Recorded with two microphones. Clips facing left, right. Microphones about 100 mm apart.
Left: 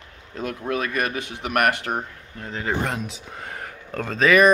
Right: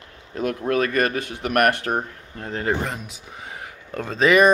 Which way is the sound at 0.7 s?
45° right (ahead or behind).